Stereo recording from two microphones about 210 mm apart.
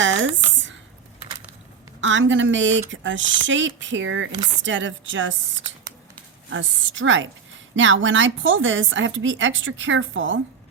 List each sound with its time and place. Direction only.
0.0 s a sound: 60° right (ahead or behind)
2.0 s speech: 60° right (ahead or behind)
6.5 s speech: 65° right (ahead or behind)